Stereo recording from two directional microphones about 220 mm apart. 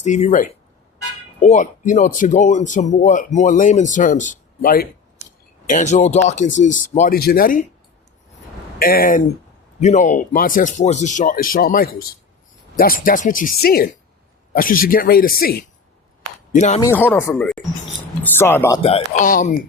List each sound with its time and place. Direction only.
0.0 s speech: 30° left (ahead or behind)
8.8 s speech: 40° left (ahead or behind)
16.6 s speech: 35° left (ahead or behind)
16.8 s speech: 10° left (ahead or behind)
18.8 s speech: 25° left (ahead or behind)